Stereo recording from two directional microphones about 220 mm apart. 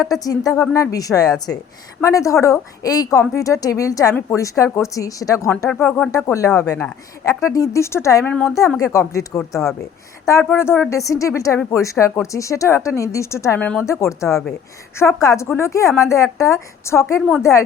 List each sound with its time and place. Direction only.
0.1 s speech: 15° left (ahead or behind)
17.2 s speech: centre (ahead or behind)